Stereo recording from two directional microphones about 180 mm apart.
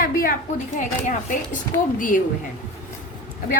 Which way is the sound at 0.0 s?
50° left (ahead or behind).